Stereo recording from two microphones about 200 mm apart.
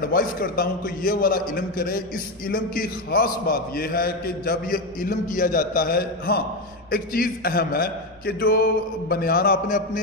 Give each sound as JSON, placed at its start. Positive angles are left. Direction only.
{"t": 0.0, "sound": "a man's voice", "side_deg": 50}